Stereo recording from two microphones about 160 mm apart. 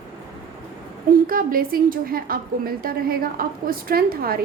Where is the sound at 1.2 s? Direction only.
65° right (ahead or behind).